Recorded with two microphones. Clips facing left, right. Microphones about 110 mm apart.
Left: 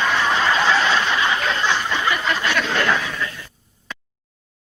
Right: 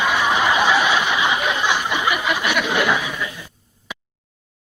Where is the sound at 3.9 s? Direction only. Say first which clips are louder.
Right 1 dB; 10° right (ahead or behind).